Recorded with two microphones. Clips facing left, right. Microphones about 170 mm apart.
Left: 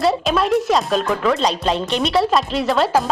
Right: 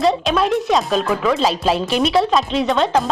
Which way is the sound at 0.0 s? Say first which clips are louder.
Right 1 dB; centre (ahead or behind).